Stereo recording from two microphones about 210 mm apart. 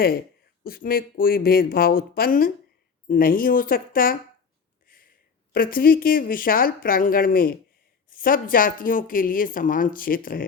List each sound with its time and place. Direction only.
0.6 s speech: 45° left (ahead or behind)
4.9 s a sound: 45° left (ahead or behind)
5.5 s speech: 45° left (ahead or behind)